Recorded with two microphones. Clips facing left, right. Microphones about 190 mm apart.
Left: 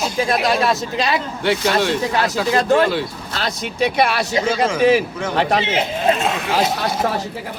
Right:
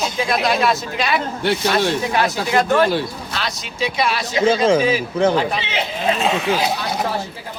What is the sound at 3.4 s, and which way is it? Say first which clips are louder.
Speech: left 5 dB; 55° left (ahead or behind).